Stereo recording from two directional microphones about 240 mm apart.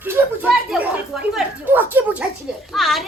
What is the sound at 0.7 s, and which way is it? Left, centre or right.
A child's voice, centre.